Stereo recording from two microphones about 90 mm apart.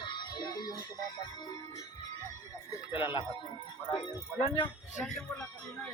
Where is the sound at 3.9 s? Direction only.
75° left (ahead or behind).